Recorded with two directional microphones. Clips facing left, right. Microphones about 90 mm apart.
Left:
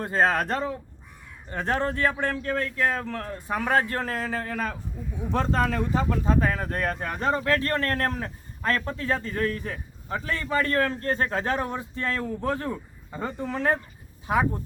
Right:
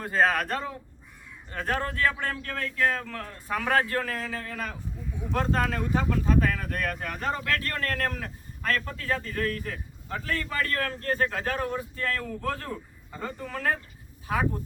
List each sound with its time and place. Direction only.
0.0 s speech: 30° left (ahead or behind)